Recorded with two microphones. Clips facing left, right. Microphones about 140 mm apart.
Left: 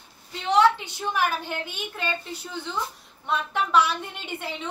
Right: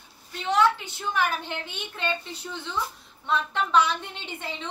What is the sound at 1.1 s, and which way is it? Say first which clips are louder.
A woman's voice: left 1 dB; 10° left (ahead or behind).